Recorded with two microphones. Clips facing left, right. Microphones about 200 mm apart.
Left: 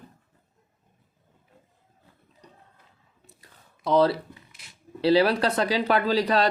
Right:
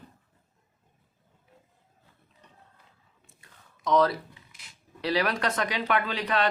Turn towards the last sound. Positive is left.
turn(degrees=35)  # may be behind; listen again after turning